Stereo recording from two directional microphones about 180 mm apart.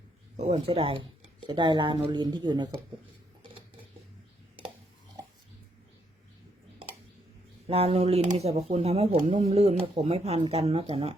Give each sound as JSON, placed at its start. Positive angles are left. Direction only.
{"t": 0.3, "sound": "speech", "side_deg": -35}
{"t": 7.7, "sound": "speech", "side_deg": -35}